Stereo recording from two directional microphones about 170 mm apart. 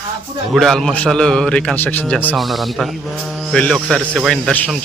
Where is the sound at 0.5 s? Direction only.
Centre (ahead or behind).